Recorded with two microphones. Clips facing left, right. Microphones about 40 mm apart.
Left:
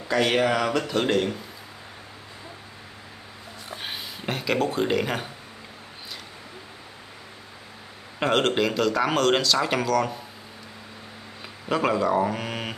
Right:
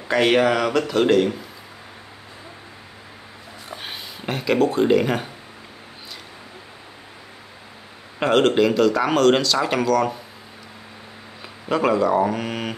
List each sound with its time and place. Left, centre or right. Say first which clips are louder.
0.1 s speech: right 5 dB; right
0.4 s speech: right 4 dB; centre
3.7 s speech: even; centre
8.2 s speech: right 5 dB; centre
11.7 s speech: right 4 dB; centre